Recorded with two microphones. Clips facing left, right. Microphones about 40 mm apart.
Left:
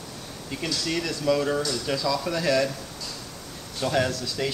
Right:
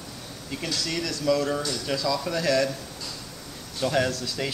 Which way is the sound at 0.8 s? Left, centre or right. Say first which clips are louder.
Left 1 dB; centre.